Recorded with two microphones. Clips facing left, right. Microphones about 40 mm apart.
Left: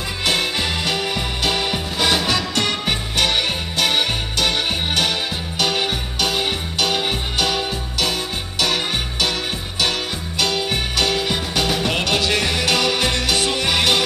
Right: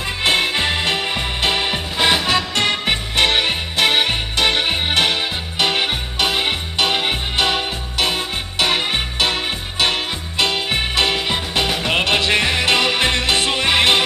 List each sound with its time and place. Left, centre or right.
0.2 s music: right